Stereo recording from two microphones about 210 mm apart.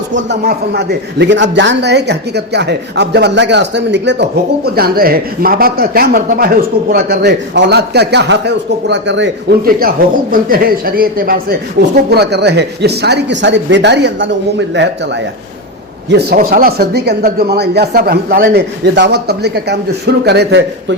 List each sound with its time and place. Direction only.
0.1 s speech: 60° right (ahead or behind)
16.0 s speech: 50° right (ahead or behind)